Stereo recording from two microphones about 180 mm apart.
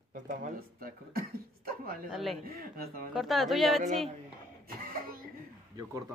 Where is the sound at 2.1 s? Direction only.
Centre (ahead or behind).